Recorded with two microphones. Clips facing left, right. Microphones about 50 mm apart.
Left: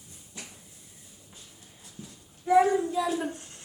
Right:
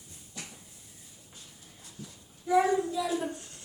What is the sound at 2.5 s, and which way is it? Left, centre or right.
Speech, left.